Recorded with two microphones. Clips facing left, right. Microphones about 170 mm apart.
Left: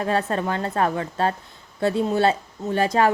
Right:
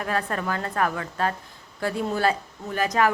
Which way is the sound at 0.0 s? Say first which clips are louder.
Left 4 dB; 25° left (ahead or behind).